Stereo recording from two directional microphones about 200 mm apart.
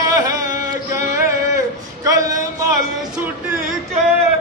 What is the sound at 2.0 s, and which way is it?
Speech, 15° right (ahead or behind).